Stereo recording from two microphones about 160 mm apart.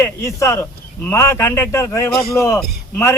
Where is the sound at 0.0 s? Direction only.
15° left (ahead or behind).